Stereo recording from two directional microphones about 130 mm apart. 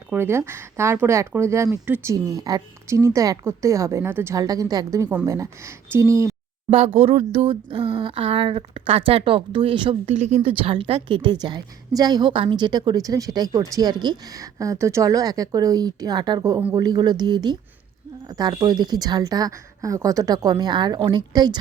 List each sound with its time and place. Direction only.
0.1 s a woman's voice: 20° right (ahead or behind)
6.7 s a woman's voice: 45° right (ahead or behind)
10.1 s a woman's voice: 60° right (ahead or behind)
10.5 s a woman's voice: 45° right (ahead or behind)